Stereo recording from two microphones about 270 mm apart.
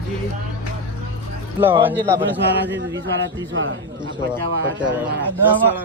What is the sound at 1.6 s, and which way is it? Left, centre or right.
Speech, centre.